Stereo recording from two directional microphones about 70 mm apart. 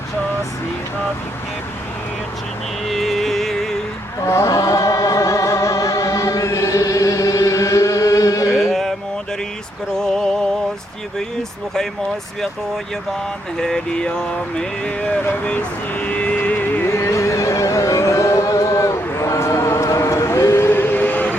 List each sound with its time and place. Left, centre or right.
2.8 s music: centre
4.3 s music: left
8.5 s carnatic music: centre
10.0 s music: centre
13.6 s a sound: centre
16.0 s music: centre
16.9 s music: left